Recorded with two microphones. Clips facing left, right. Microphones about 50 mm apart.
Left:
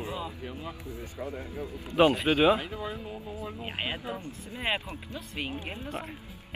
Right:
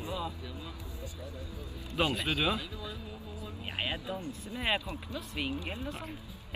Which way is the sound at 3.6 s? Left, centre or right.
Left.